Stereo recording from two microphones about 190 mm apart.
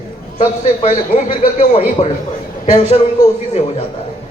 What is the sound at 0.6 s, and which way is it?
A man's voice, 35° left (ahead or behind).